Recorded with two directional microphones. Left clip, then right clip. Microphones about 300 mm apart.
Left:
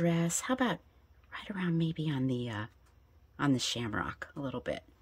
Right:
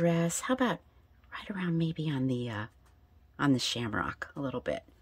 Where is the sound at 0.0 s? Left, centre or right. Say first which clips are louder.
Right 3 dB; centre.